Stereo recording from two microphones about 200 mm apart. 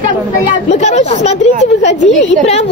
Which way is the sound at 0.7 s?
35° left (ahead or behind).